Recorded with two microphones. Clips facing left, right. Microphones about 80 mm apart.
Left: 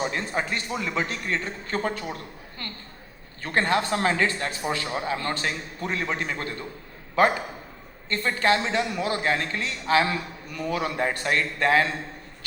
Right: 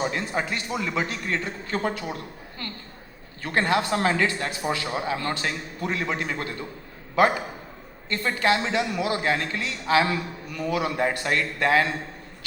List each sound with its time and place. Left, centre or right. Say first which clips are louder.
0.1 s a man's voice: even; left